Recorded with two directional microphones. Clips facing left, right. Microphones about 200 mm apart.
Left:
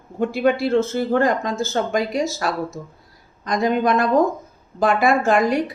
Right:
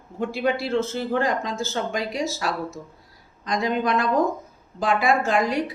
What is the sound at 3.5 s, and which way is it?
Speech, 50° left (ahead or behind).